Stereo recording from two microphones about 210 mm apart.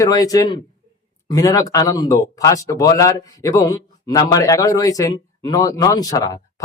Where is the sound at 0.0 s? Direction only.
15° left (ahead or behind).